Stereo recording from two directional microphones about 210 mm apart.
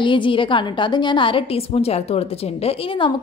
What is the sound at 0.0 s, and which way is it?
A woman's voice, 25° left (ahead or behind).